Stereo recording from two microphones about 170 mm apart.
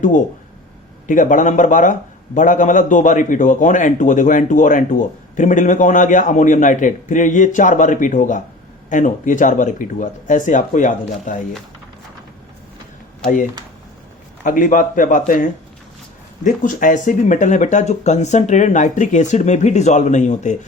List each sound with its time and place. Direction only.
1.0 s a man's voice: 50° left (ahead or behind)
14.4 s a man's voice: 50° left (ahead or behind)